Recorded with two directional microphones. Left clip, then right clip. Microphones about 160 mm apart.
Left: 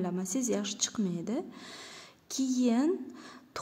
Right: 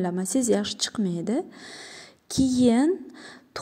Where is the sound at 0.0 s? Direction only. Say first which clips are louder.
Right 8 dB; 40° right (ahead or behind).